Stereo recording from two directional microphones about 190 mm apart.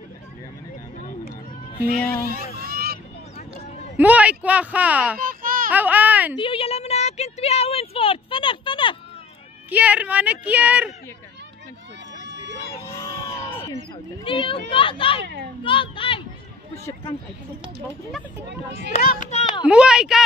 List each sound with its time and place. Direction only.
2.0 s speech: 10° left (ahead or behind)
2.6 s vehicle: 55° right (ahead or behind)
4.0 s speech: 5° right (ahead or behind)
5.2 s a sound: 45° right (ahead or behind)
5.7 s speech: 10° right (ahead or behind)
6.3 s a sound: 30° left (ahead or behind)
9.7 s speech: 10° right (ahead or behind)
12.7 s crowd: 15° left (ahead or behind)
14.2 s a child's voice: 25° left (ahead or behind)
18.9 s speech: 55° left (ahead or behind)
19.3 s speech: 25° left (ahead or behind)
19.6 s a woman's voice: 5° right (ahead or behind)